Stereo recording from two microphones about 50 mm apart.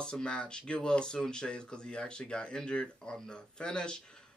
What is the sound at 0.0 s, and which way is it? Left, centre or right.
Speech, centre.